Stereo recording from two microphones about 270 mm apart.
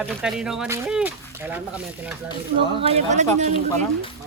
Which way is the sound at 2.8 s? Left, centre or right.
Right.